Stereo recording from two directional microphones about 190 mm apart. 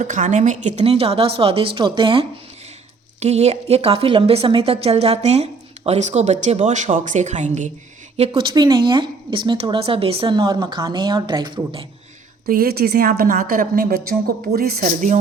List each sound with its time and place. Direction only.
0.0 s a woman's voice: 40° right (ahead or behind)
12.5 s a woman's voice: 55° right (ahead or behind)